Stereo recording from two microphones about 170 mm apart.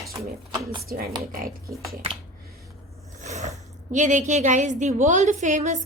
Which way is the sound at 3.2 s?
45° right (ahead or behind).